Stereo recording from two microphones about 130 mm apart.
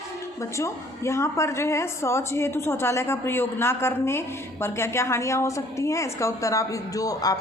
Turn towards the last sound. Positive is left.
turn(degrees=30)  # may be behind; listen again after turning